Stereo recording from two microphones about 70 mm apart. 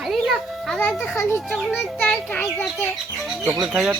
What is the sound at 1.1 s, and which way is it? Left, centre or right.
Speech, left.